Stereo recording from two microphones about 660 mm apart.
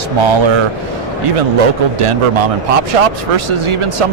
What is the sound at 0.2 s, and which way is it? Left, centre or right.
Speech, right.